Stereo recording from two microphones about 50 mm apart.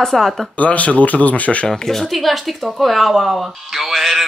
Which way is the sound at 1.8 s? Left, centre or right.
Centre.